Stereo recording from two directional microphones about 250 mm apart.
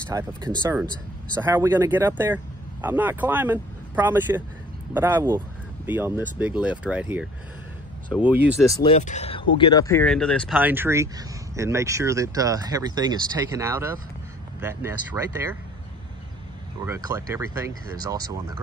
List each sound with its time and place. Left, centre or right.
0.1 s speech: centre
8.6 s speech: left; by 10.6 s centre
10.6 s speech: centre
16.8 s speech: centre